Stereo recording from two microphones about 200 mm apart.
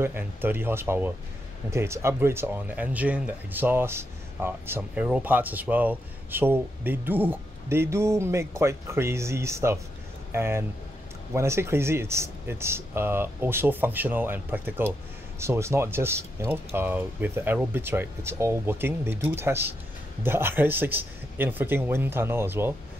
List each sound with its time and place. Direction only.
0.0 s speech: 10° right (ahead or behind)